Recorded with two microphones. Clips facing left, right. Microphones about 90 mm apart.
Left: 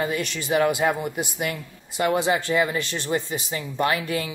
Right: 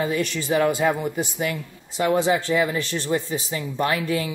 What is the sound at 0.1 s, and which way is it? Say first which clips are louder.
Speech: right 2 dB; 20° left (ahead or behind).